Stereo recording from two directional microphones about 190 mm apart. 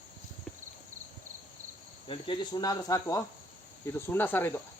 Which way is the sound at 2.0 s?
25° left (ahead or behind).